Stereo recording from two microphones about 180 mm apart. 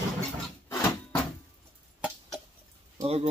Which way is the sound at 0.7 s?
15° left (ahead or behind).